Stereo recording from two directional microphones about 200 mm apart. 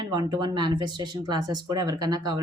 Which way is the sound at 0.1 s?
20° right (ahead or behind).